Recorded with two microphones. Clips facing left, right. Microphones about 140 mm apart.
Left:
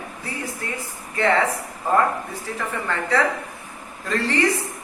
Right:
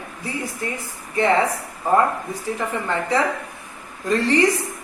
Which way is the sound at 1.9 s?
15° right (ahead or behind).